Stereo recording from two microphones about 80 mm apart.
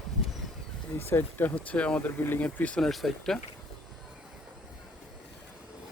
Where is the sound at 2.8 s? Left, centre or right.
Centre.